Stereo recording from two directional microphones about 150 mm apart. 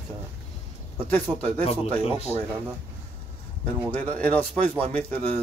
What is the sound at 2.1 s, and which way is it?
Speech, 45° left (ahead or behind).